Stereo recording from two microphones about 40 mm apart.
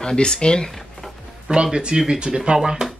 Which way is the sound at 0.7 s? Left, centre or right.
Centre.